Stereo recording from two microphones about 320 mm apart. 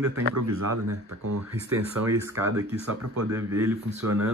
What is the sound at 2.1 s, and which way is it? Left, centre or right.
Speech, centre.